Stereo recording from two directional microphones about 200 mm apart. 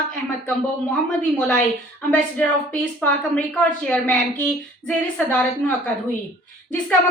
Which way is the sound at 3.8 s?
5° left (ahead or behind).